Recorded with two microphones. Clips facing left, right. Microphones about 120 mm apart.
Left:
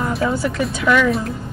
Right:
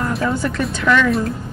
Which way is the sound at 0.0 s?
10° left (ahead or behind).